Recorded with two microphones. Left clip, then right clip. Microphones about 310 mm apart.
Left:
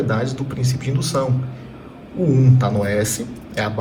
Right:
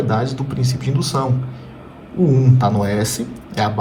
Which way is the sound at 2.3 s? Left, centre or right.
Centre.